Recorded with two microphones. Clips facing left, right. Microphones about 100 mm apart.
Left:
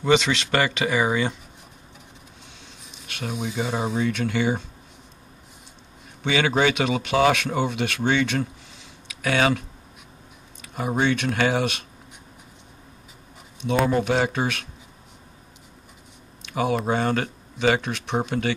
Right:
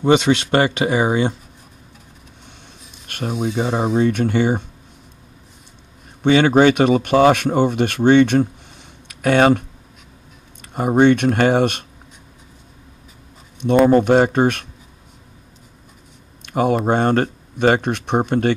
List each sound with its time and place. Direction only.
0.2 s speech: 25° right (ahead or behind)
3.1 s speech: 50° right (ahead or behind)
6.2 s speech: 50° right (ahead or behind)
8.7 s a sound: 50° right (ahead or behind)
10.6 s speech: 50° right (ahead or behind)
13.8 s speech: 55° right (ahead or behind)
16.4 s a sound: 50° right (ahead or behind)
16.8 s speech: 55° right (ahead or behind)